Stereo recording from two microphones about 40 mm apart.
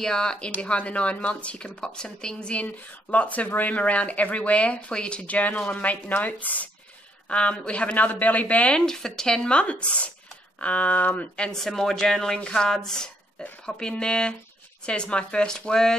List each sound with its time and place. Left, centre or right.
0.0 s speech: centre
0.6 s speech: left
2.5 s speech: left
3.7 s speech: left
5.2 s speech: left
7.2 s speech: left
8.7 s speech: centre
9.5 s speech: left
11.5 s speech: centre
12.4 s speech: left
12.6 s speech: centre